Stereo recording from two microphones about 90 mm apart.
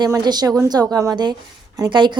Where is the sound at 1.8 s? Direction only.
60° right (ahead or behind).